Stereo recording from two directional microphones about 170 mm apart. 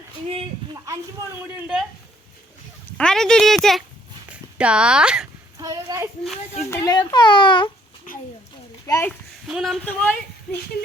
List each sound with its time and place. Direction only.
1.5 s speech: 5° right (ahead or behind)
3.0 s speech: 5° left (ahead or behind)
5.5 s a sound: 20° right (ahead or behind)
6.7 s speech: 20° left (ahead or behind)
8.9 s a child's voice: 15° left (ahead or behind)
9.5 s speech: centre (ahead or behind)